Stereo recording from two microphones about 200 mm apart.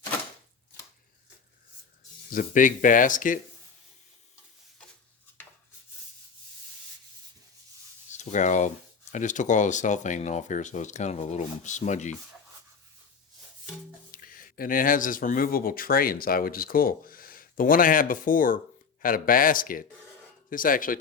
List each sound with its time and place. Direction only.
2.3 s speech: 45° left (ahead or behind)
8.2 s speech: 40° left (ahead or behind)
14.1 s speech: 45° left (ahead or behind)